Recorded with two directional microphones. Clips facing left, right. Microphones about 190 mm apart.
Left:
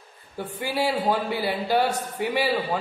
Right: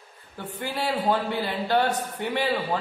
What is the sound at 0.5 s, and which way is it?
A man's voice, 10° left (ahead or behind).